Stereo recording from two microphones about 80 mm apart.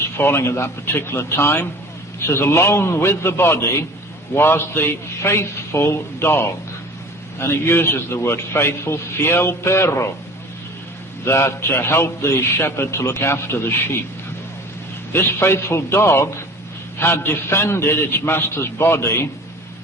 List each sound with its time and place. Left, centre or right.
0.2 s a man's voice: left
11.3 s a man's voice: left
15.1 s a man's voice: left